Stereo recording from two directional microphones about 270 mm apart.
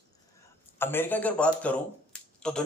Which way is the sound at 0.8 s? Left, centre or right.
Centre.